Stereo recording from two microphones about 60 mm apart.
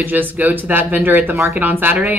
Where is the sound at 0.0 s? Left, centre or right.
Right.